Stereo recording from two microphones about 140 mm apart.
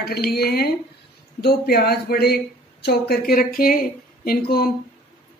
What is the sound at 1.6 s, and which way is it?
Speech, 90° left.